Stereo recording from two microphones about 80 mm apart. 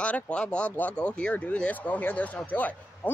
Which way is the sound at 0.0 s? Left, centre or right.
Centre.